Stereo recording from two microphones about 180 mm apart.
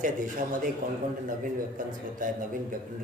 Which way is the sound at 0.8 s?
45° right (ahead or behind).